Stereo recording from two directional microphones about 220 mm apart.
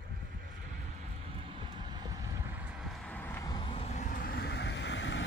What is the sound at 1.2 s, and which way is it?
Vehicle, 25° right (ahead or behind).